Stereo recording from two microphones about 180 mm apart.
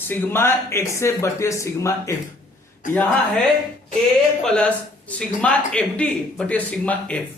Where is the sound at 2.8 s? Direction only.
45° left (ahead or behind).